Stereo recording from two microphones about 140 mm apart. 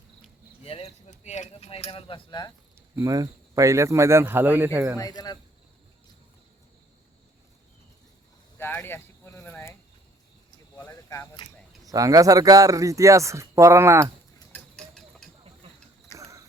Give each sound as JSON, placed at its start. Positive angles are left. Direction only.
{"t": 0.6, "sound": "keys jangling", "side_deg": 45}
{"t": 2.9, "sound": "speech", "side_deg": -25}
{"t": 4.9, "sound": "speech", "side_deg": 25}
{"t": 8.5, "sound": "a sound", "side_deg": 15}
{"t": 11.4, "sound": "speech", "side_deg": 35}
{"t": 11.9, "sound": "speech", "side_deg": -25}
{"t": 14.5, "sound": "a sound", "side_deg": 5}
{"t": 16.1, "sound": "clip-clop", "side_deg": -20}